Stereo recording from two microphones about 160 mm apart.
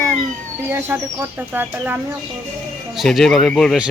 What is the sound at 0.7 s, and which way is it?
Speech, 15° right (ahead or behind).